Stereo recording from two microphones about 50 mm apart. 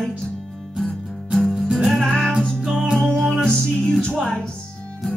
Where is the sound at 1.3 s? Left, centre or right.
Centre.